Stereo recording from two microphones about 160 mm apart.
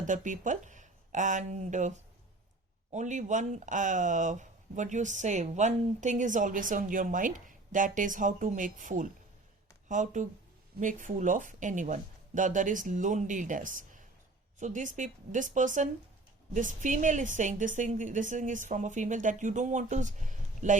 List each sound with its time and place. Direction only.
0.0 s speech: 55° right (ahead or behind)